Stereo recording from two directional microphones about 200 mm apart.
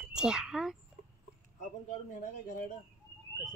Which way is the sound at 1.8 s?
40° left (ahead or behind).